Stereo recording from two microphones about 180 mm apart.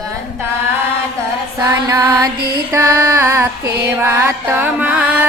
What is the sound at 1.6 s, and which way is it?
Music, 20° right (ahead or behind).